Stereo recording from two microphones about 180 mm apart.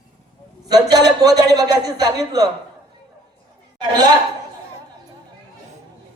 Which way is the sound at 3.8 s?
25° right (ahead or behind).